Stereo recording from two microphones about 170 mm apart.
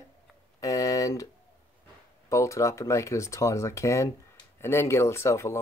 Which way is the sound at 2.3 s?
15° left (ahead or behind).